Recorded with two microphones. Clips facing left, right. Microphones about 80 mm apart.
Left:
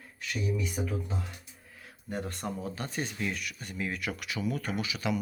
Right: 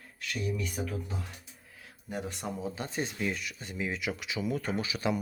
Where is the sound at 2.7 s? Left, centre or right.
Right.